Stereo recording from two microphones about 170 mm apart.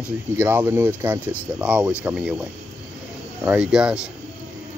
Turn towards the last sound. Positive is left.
turn(degrees=-5)  # may be behind; listen again after turning